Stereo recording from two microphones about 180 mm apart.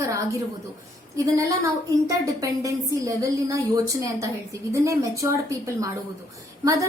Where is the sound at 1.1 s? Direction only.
20° right (ahead or behind).